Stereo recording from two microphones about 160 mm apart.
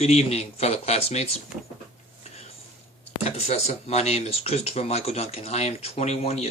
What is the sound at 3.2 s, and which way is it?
Speech, 40° left (ahead or behind).